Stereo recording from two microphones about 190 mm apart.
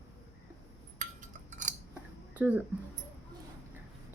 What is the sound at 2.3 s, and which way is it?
Speech, 10° right (ahead or behind).